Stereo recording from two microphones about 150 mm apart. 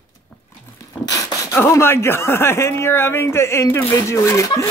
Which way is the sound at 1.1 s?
15° left (ahead or behind).